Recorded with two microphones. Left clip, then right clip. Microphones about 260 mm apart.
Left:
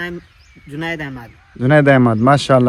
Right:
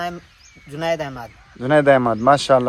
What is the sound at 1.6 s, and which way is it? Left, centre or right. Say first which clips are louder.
Speech: left 2 dB; left.